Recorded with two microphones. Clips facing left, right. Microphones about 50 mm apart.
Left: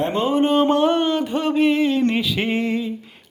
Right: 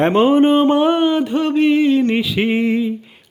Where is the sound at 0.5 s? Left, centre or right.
Centre.